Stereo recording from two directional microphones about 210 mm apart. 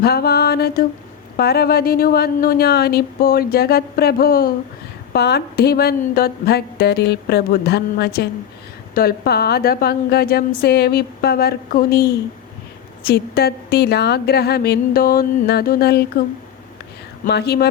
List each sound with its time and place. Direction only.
0.0 s speech: 50° left (ahead or behind)
17.2 s speech: 50° left (ahead or behind)